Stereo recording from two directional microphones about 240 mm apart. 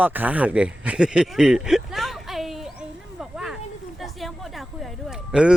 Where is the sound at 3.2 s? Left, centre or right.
Centre.